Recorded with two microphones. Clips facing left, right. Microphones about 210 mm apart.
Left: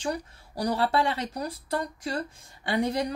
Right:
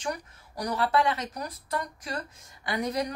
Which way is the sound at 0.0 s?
30° left (ahead or behind).